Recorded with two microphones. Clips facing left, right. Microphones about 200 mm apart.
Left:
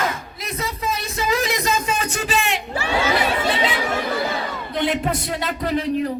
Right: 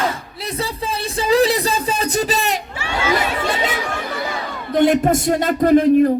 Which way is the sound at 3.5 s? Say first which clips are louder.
Even; 45° right (ahead or behind).